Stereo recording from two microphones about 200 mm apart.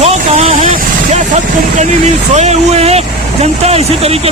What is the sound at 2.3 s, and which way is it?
Speech, 35° right (ahead or behind).